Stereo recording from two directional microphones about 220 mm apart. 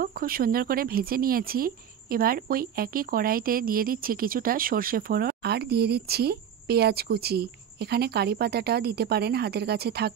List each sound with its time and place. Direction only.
0.0 s speech: 40° right (ahead or behind)